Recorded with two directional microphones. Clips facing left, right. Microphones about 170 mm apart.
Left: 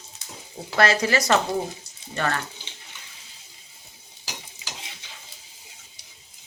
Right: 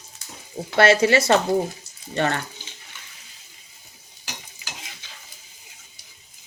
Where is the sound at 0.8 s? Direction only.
30° right (ahead or behind).